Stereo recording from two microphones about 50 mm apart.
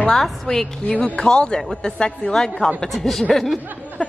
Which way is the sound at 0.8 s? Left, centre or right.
Left.